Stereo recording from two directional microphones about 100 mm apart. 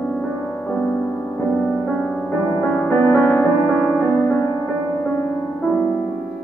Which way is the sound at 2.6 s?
15° left (ahead or behind).